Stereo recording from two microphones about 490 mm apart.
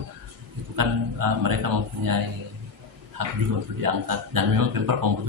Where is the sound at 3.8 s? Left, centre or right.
Right.